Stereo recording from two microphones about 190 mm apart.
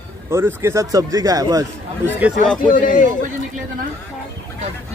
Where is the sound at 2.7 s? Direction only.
45° left (ahead or behind).